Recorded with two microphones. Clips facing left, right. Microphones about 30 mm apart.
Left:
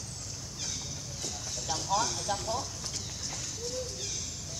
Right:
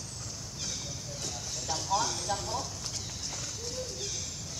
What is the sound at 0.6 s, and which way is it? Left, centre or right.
Vehicle, centre.